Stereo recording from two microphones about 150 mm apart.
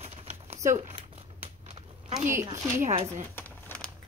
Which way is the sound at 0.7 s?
50° right (ahead or behind).